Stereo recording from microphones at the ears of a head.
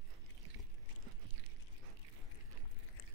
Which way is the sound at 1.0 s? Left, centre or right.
Right.